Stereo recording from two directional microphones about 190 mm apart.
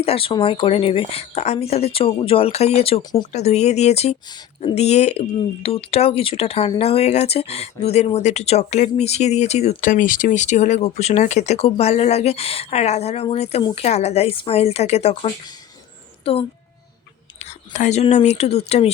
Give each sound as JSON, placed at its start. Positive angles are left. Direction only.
{"t": 0.0, "sound": "speech", "side_deg": 30}
{"t": 3.3, "sound": "a child's voice", "side_deg": 35}